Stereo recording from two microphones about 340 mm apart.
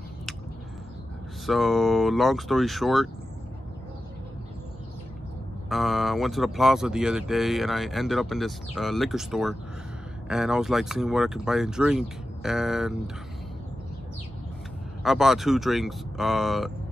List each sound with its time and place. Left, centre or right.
1.4 s speech: centre
5.7 s speech: centre
15.0 s speech: centre